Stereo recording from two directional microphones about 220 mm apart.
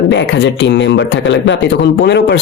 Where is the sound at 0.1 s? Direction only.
55° left (ahead or behind).